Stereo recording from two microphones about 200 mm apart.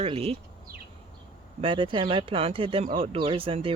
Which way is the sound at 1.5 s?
25° right (ahead or behind).